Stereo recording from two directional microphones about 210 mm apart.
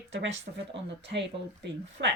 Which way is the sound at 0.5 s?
55° right (ahead or behind).